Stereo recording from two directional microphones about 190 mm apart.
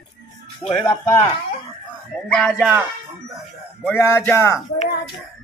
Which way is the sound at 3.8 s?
10° left (ahead or behind).